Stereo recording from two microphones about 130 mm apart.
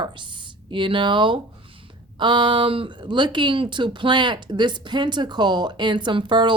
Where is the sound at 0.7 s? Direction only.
40° right (ahead or behind).